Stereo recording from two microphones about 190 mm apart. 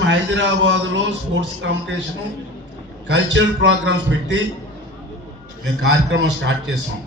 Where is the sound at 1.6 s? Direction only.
85° right.